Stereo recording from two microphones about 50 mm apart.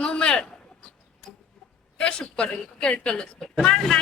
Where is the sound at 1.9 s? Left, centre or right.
Left.